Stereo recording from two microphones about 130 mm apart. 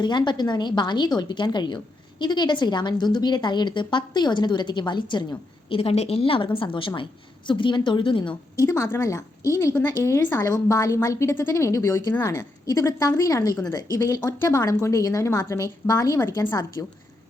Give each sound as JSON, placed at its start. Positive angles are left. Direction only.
{"t": 0.0, "sound": "a woman's voice", "side_deg": 35}
{"t": 5.6, "sound": "a woman's voice", "side_deg": 45}
{"t": 8.5, "sound": "a woman's voice", "side_deg": 20}